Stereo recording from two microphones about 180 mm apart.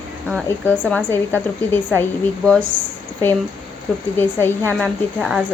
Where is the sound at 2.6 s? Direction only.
45° right (ahead or behind).